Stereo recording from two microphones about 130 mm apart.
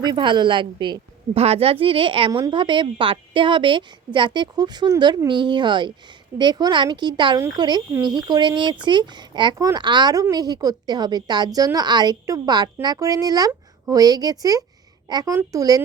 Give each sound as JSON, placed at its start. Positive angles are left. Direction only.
{"t": 0.0, "sound": "a woman's voice", "side_deg": -35}
{"t": 1.4, "sound": "a woman's voice", "side_deg": -50}